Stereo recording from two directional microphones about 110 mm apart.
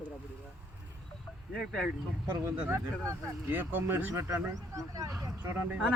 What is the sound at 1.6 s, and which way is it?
Speech, centre (ahead or behind).